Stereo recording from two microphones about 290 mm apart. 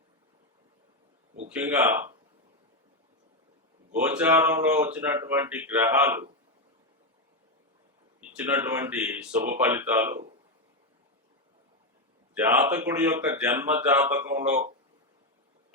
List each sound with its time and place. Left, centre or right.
1.5 s speech: centre
3.9 s speech: centre
8.2 s speech: centre
12.3 s speech: centre